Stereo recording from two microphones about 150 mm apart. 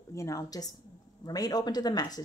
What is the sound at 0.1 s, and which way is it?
Speech, 20° left (ahead or behind).